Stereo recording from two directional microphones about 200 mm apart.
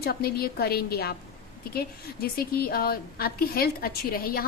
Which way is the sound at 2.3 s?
50° left (ahead or behind).